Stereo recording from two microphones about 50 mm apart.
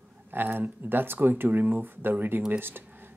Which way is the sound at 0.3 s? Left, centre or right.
Right.